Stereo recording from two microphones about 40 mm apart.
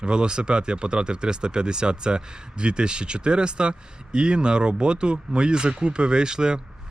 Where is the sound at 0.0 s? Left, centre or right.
Right.